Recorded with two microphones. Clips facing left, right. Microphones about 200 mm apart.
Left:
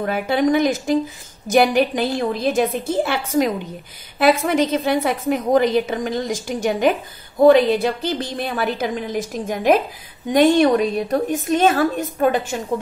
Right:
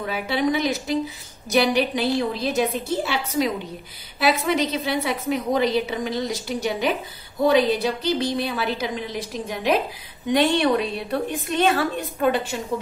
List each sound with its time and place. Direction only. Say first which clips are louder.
0.0 s a woman's voice: left 5 dB; 50° left (ahead or behind)